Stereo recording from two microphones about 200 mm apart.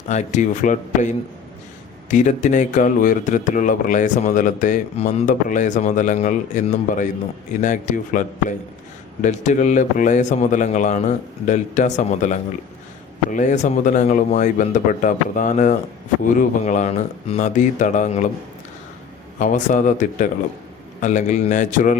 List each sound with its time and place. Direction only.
0.1 s a man's voice: 35° left (ahead or behind)
19.4 s a man's voice: 40° left (ahead or behind)